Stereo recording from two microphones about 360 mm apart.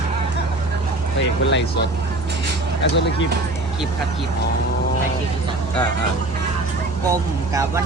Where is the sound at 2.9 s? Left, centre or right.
Left.